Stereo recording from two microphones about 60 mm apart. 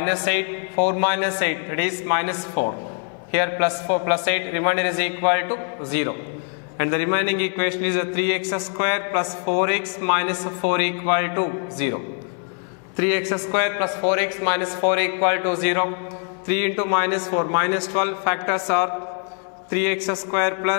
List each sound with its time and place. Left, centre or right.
0.0 s a man's voice: centre